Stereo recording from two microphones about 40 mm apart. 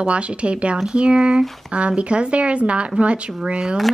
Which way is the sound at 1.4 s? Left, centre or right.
Centre.